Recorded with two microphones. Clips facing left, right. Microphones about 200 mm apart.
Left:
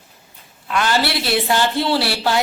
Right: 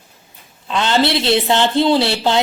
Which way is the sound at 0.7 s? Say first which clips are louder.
Right 3 dB; 20° right (ahead or behind).